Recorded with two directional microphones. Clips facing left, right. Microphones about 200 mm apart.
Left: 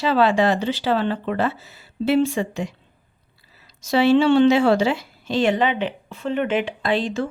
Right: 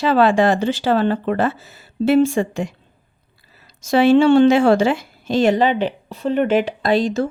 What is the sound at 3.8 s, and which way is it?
A woman's voice, 50° right (ahead or behind).